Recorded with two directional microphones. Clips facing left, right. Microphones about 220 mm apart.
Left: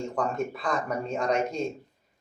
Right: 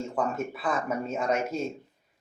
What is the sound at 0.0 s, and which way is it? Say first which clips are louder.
Speech: left 1 dB; 5° right (ahead or behind).